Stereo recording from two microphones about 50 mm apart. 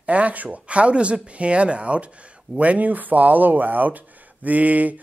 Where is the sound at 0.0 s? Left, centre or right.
Right.